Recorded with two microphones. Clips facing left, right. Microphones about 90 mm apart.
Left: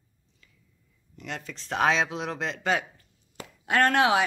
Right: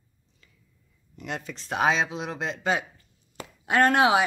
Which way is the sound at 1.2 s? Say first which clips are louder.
Right 3 dB; 10° right (ahead or behind).